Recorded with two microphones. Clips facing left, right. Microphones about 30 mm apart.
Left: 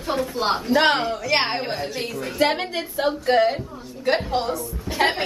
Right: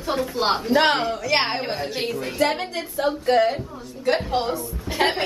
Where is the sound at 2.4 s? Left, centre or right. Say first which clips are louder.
Left 2 dB; centre.